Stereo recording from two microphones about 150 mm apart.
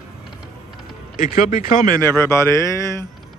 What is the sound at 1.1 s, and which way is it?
Speech, 65° left (ahead or behind).